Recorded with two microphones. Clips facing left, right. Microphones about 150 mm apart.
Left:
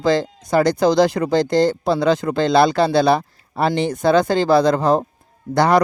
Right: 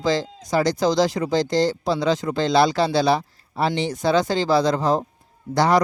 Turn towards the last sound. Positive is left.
turn(degrees=60)  # may be behind; listen again after turning